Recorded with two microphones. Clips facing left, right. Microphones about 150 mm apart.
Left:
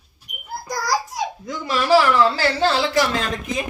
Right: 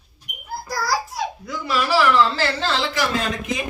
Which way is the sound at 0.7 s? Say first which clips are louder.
Left 1 dB; 20° left (ahead or behind).